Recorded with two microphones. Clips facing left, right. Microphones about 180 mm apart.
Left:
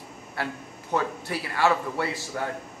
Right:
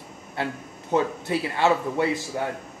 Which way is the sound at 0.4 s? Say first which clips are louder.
Right 3 dB; 20° right (ahead or behind).